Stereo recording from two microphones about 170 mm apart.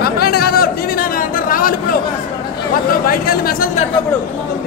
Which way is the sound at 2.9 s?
60° left (ahead or behind).